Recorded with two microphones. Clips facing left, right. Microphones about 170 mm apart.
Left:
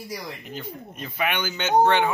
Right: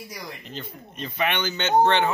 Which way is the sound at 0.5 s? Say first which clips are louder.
Left 2 dB; 10° left (ahead or behind).